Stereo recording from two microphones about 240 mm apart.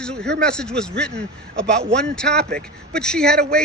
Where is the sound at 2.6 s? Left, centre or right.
Centre.